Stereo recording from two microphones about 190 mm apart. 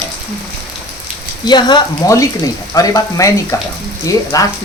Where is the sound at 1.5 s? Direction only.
20° left (ahead or behind).